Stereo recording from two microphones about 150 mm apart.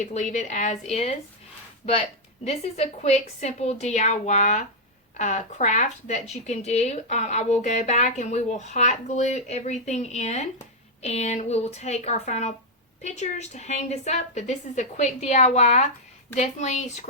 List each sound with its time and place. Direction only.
0.0 s speech: 55° left (ahead or behind)